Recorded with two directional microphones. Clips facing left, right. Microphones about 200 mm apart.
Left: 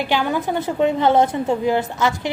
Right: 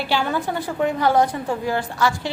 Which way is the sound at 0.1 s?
15° left (ahead or behind).